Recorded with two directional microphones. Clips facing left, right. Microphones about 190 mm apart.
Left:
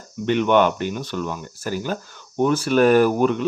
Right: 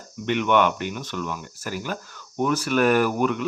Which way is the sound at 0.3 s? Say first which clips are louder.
Left 3 dB; 35° left (ahead or behind).